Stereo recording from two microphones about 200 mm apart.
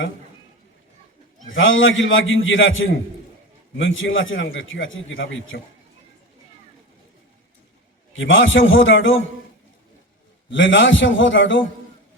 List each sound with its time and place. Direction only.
1.5 s a man's voice: 75° left (ahead or behind)
8.1 s a man's voice: 75° left (ahead or behind)
10.5 s a man's voice: 70° left (ahead or behind)